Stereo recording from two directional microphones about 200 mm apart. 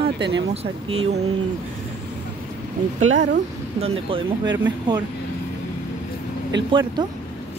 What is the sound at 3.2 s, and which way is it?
Speech, 35° right (ahead or behind).